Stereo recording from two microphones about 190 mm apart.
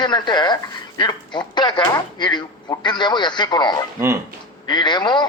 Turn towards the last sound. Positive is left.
turn(degrees=25)  # may be behind; listen again after turning